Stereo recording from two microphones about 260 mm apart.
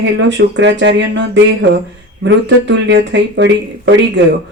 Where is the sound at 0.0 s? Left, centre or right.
Right.